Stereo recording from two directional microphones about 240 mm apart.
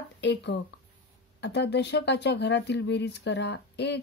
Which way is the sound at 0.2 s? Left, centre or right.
Left.